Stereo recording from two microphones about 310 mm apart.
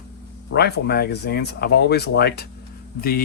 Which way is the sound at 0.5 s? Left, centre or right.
Left.